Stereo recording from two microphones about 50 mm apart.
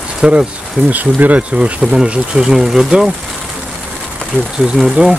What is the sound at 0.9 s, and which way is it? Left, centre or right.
Speech, right.